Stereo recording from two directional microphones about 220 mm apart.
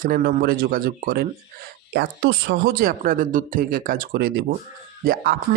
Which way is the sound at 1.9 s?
55° right (ahead or behind).